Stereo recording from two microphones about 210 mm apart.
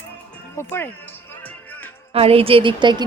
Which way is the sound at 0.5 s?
10° left (ahead or behind).